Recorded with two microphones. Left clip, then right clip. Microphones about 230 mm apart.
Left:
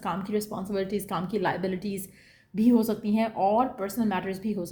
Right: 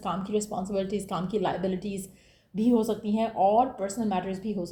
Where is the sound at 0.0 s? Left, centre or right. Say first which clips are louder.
Even; left.